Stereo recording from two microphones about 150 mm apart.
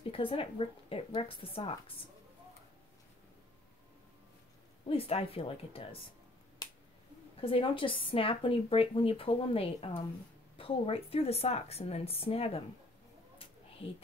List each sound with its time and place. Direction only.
0.1 s a woman's voice: 40° left (ahead or behind)
4.8 s a woman's voice: 40° left (ahead or behind)
6.6 s finger snapping: 25° left (ahead or behind)
7.4 s a woman's voice: 35° left (ahead or behind)